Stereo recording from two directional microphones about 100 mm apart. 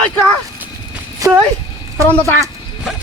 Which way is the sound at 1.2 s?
35° right (ahead or behind).